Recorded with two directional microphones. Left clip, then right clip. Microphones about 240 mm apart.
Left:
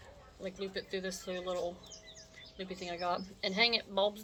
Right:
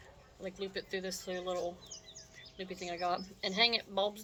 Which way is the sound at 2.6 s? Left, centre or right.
Centre.